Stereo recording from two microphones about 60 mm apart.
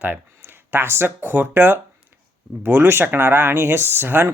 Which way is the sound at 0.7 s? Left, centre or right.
Right.